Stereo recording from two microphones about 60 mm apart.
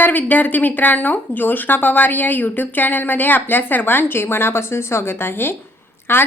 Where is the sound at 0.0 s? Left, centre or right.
Left.